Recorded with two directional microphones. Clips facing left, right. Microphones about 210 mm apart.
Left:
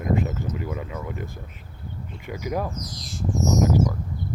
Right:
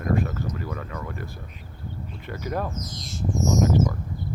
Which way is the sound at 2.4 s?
10° left (ahead or behind).